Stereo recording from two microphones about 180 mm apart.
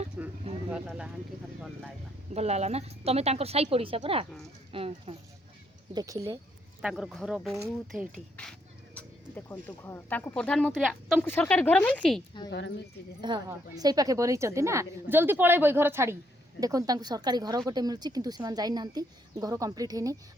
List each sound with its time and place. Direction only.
0.2 s a sound: 10° right (ahead or behind)
0.7 s speech: 5° right (ahead or behind)
2.3 s speech: 35° right (ahead or behind)
5.9 s speech: 20° right (ahead or behind)
6.8 s speech: 5° right (ahead or behind)
12.5 s speech: 85° left
13.2 s a woman's voice: 25° right (ahead or behind)